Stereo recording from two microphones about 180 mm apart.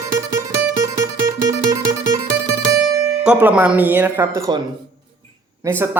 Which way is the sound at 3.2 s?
5° right (ahead or behind).